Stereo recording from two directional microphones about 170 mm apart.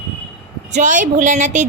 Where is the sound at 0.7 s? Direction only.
45° right (ahead or behind).